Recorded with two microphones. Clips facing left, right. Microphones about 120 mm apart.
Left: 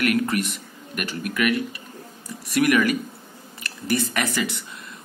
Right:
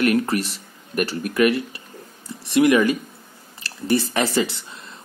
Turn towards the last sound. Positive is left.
turn(degrees=-30)  # may be behind; listen again after turning